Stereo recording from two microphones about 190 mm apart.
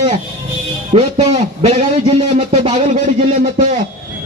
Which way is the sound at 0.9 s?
30° right (ahead or behind).